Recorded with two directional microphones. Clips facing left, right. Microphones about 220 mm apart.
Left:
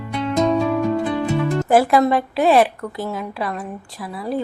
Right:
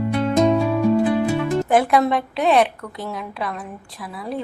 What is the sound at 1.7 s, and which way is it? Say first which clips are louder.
A woman's voice: left 3 dB; centre (ahead or behind).